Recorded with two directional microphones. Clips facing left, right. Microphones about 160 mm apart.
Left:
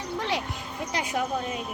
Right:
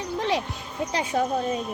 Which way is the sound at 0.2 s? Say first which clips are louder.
Right 4 dB; 25° right (ahead or behind).